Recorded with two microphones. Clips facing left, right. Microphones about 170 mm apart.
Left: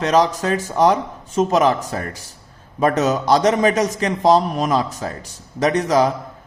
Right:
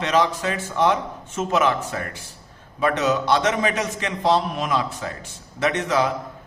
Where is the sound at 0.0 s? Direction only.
40° left (ahead or behind).